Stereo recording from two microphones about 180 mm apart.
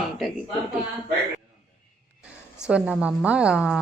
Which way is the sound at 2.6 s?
5° right (ahead or behind).